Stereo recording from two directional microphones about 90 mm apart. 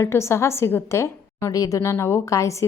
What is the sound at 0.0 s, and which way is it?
A woman's voice, 30° left (ahead or behind).